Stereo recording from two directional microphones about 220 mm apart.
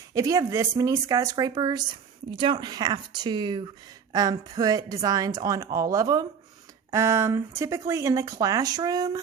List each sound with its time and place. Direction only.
0.1 s speech: 15° right (ahead or behind)